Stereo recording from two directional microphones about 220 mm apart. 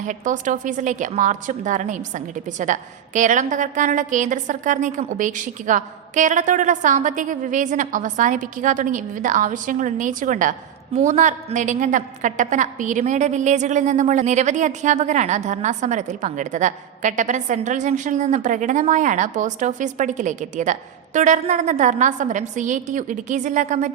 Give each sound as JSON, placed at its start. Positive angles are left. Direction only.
{"t": 0.0, "sound": "a woman's voice", "side_deg": -35}